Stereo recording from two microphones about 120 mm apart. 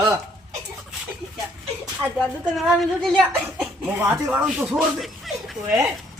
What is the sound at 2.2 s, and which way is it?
Speech, centre (ahead or behind).